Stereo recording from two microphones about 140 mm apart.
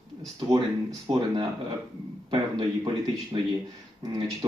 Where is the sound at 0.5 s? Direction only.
25° right (ahead or behind).